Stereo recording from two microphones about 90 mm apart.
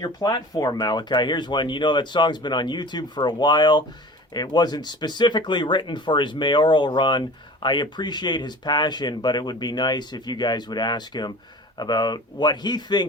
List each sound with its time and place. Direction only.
0.0 s speech: 45° left (ahead or behind)